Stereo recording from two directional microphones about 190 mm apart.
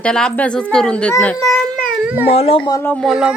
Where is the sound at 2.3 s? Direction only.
30° left (ahead or behind).